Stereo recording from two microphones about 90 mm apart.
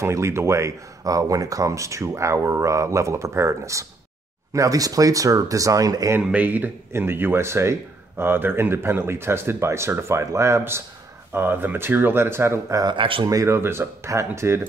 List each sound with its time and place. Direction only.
0.0 s speech: 30° right (ahead or behind)
6.2 s speech: 20° right (ahead or behind)
12.8 s speech: 70° right (ahead or behind)
13.3 s speech: 35° right (ahead or behind)